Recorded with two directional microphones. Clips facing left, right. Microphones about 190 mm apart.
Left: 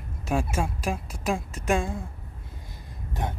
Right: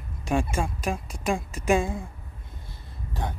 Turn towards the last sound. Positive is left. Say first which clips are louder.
# left 1 dB
turn(degrees=20)  # may be behind; listen again after turning